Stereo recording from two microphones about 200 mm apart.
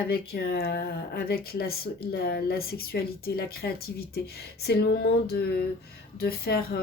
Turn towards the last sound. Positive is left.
turn(degrees=50)  # may be behind; listen again after turning